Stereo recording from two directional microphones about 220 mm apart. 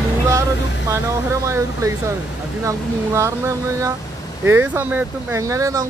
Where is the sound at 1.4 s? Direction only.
15° right (ahead or behind).